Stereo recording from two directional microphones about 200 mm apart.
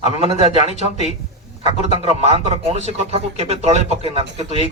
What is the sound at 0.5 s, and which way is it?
A man's voice, 35° left (ahead or behind).